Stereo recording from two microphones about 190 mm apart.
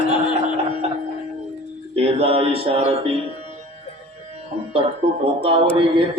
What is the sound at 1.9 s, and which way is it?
A man's voice, 30° right (ahead or behind).